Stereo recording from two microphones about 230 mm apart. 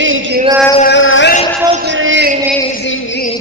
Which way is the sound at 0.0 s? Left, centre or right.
Right.